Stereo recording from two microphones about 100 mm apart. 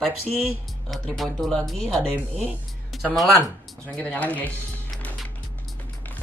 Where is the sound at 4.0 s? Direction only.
15° left (ahead or behind).